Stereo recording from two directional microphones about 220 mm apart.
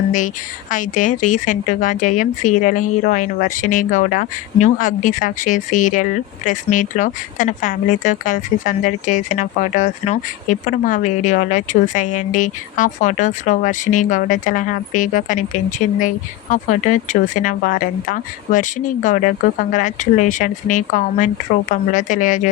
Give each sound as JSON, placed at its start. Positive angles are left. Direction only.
{"t": 0.7, "sound": "speech", "side_deg": 35}